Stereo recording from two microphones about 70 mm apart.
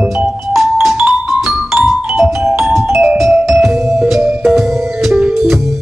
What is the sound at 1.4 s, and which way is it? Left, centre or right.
Music, centre.